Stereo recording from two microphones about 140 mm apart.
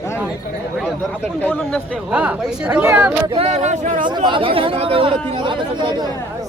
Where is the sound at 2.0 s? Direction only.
10° right (ahead or behind).